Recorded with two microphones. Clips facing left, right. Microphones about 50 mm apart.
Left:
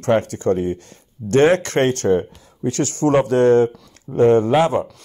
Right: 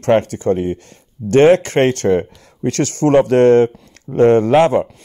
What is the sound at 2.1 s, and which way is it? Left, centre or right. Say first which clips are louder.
Speech: right 2 dB; right.